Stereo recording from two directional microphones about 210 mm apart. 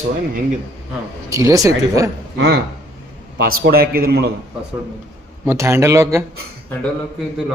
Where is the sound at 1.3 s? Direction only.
15° right (ahead or behind).